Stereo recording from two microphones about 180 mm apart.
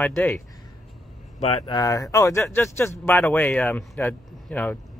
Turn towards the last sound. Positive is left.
turn(degrees=10)  # may be behind; listen again after turning